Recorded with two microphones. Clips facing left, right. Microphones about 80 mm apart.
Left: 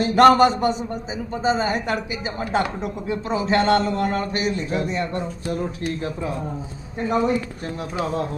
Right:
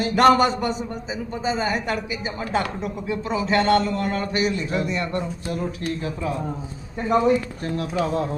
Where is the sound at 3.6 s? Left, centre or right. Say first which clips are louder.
Even; left.